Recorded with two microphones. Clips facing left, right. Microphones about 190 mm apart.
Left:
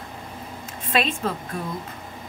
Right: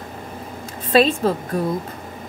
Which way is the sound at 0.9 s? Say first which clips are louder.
Right 8 dB; 35° right (ahead or behind).